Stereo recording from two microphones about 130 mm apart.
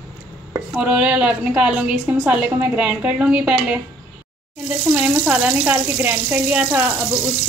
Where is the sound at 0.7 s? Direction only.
10° right (ahead or behind).